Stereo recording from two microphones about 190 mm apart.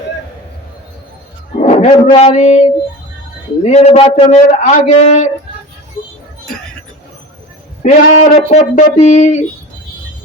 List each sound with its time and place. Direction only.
1.6 s a man's voice: 35° left (ahead or behind)
6.0 s music: 20° left (ahead or behind)
7.8 s a man's voice: 40° left (ahead or behind)